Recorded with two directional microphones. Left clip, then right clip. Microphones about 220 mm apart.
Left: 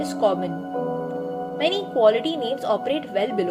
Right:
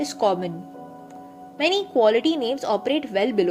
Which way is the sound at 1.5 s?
20° right (ahead or behind).